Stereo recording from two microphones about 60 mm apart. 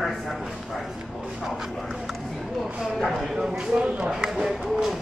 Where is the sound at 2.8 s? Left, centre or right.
Centre.